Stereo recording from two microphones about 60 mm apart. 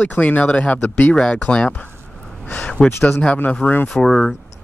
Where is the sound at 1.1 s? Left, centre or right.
Centre.